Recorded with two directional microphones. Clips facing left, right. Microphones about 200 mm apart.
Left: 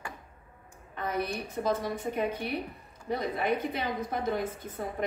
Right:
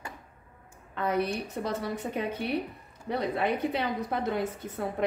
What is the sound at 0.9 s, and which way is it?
A woman's voice, 65° right (ahead or behind).